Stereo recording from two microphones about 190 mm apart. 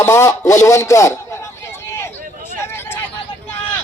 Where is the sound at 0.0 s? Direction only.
15° left (ahead or behind).